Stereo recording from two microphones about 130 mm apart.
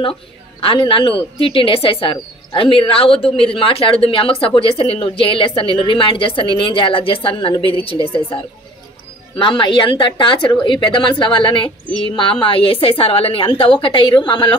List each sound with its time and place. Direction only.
0.0 s a woman's voice: 45° left (ahead or behind)
9.4 s a woman's voice: 40° left (ahead or behind)